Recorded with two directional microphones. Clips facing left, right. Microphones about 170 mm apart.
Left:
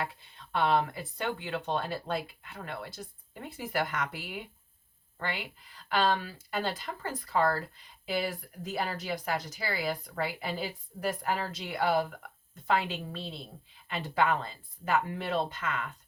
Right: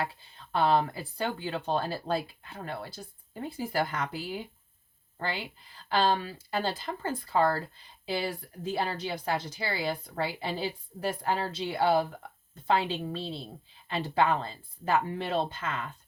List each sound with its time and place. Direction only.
0.0 s speech: 30° right (ahead or behind)